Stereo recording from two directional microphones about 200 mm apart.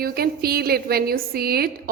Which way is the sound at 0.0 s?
50° right (ahead or behind).